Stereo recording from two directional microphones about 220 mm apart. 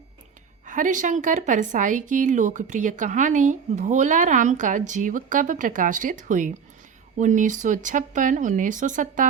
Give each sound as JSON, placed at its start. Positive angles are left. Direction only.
{"t": 0.6, "sound": "a woman's voice", "side_deg": -35}